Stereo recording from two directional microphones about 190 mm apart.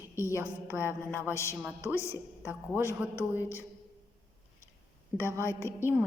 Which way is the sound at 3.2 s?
15° left (ahead or behind).